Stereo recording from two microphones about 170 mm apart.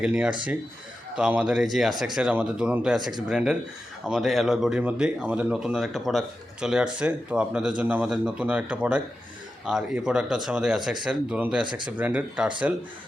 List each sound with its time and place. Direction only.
0.0 s speech: 5° right (ahead or behind)
11.6 s speech: 25° right (ahead or behind)
11.9 s speech: 10° right (ahead or behind)